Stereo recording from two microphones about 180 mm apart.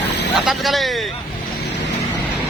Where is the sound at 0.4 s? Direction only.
Centre (ahead or behind).